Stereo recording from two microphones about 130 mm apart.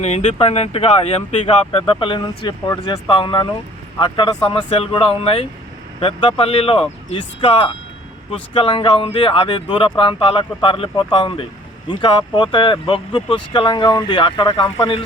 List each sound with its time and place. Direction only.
0.0 s speech: 60° left (ahead or behind)
1.9 s speech: 40° left (ahead or behind)